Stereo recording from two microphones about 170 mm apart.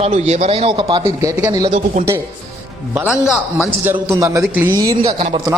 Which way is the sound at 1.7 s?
50° right (ahead or behind).